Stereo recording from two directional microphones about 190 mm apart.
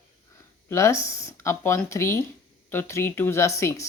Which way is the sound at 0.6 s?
15° left (ahead or behind).